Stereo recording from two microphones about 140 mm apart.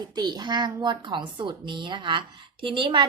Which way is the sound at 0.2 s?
30° right (ahead or behind).